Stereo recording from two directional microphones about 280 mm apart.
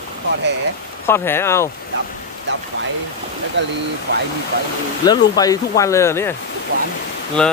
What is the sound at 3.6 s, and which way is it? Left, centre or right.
Speech, right.